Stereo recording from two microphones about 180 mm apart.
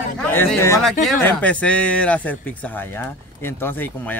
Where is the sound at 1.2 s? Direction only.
10° left (ahead or behind).